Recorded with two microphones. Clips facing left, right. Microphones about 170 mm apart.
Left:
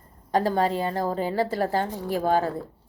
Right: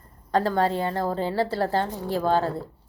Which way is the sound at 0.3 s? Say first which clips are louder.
Even; 15° left (ahead or behind).